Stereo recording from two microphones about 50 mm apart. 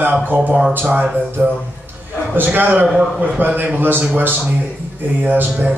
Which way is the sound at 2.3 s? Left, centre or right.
Right.